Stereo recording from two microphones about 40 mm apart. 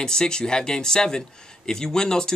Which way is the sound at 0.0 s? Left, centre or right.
Centre.